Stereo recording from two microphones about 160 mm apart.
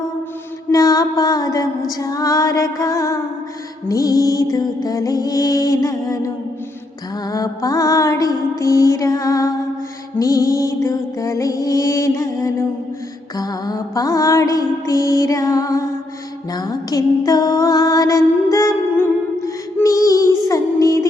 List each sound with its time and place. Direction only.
0.7 s music: 20° left (ahead or behind)